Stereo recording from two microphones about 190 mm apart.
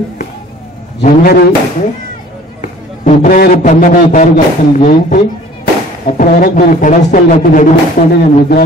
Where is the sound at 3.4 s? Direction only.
45° left (ahead or behind).